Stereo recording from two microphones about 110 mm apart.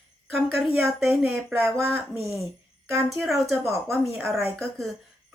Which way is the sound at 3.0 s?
Centre (ahead or behind).